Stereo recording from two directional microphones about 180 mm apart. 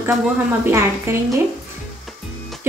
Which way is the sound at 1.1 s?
15° right (ahead or behind).